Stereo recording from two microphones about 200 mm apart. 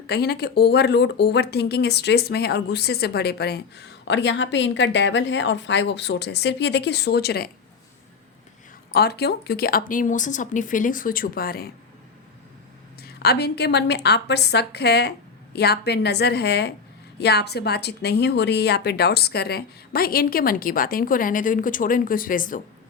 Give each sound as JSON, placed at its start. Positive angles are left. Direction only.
{"t": 0.1, "sound": "speech", "side_deg": 55}
{"t": 8.9, "sound": "a woman's voice", "side_deg": 55}
{"t": 13.0, "sound": "a woman's voice", "side_deg": 50}